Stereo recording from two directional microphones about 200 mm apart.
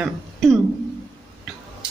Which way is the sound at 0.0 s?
Centre (ahead or behind).